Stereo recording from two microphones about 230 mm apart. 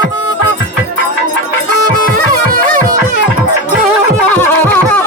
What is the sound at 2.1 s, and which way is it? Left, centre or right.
Music, right.